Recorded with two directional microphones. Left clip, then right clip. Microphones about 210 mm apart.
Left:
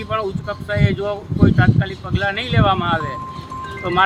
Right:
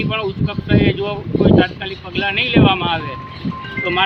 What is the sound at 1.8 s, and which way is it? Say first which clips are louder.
Speech: right 1 dB; 20° left (ahead or behind).